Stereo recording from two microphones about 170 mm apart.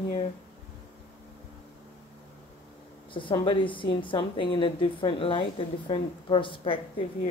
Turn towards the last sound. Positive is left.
turn(degrees=30)  # may be behind; listen again after turning